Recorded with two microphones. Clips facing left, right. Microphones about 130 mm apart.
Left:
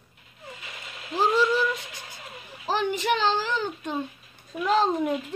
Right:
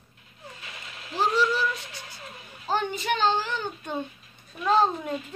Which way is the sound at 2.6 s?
90° left.